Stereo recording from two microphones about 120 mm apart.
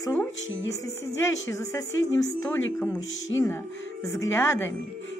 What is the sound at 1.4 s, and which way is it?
Speech, 25° left (ahead or behind).